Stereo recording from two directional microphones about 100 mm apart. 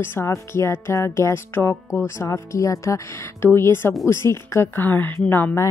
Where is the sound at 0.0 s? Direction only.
25° left (ahead or behind).